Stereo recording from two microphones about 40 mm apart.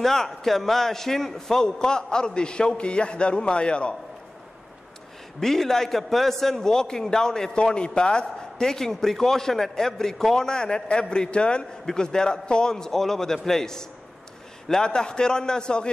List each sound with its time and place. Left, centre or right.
0.0 s a man's voice: centre; by 3.9 s left
5.4 s a man's voice: centre
6.7 s a man's voice: centre